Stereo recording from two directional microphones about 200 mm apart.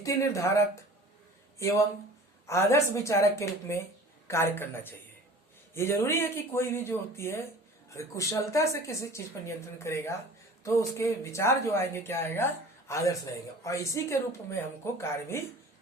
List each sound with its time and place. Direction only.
0.0 s speech: 15° left (ahead or behind)